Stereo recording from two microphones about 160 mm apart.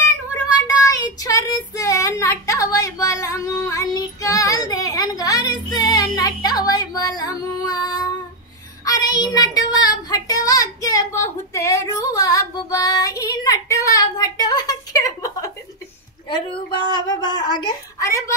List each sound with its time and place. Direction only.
0.0 s child singing: 20° left (ahead or behind)
16.3 s a woman's voice: 30° left (ahead or behind)